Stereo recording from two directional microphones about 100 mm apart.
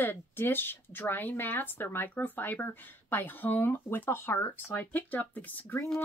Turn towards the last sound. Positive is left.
turn(degrees=15)  # may be behind; listen again after turning